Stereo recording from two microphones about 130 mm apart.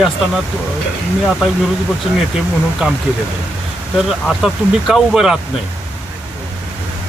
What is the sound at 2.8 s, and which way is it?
Speech, 5° right (ahead or behind).